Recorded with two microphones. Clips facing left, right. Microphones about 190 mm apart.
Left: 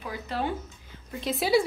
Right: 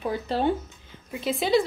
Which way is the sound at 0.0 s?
30° right (ahead or behind).